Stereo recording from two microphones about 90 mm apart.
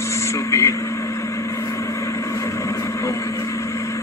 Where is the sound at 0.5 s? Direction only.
30° left (ahead or behind).